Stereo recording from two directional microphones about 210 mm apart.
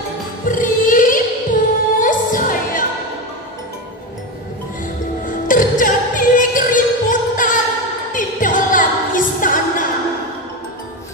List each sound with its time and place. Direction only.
0.5 s music: 40° left (ahead or behind)
5.2 s music: 40° left (ahead or behind)